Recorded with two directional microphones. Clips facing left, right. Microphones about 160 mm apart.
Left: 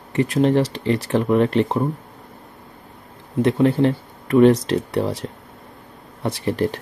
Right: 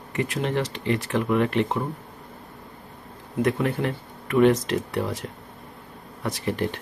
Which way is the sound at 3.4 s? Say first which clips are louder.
Left 7 dB; 30° left (ahead or behind).